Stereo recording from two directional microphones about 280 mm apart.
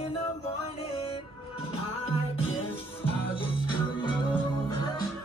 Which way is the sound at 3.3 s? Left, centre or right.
Centre.